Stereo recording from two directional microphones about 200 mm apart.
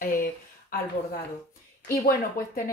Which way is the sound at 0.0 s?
45° left (ahead or behind).